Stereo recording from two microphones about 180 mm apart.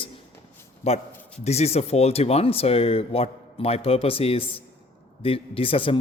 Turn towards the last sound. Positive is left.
turn(degrees=30)  # may be behind; listen again after turning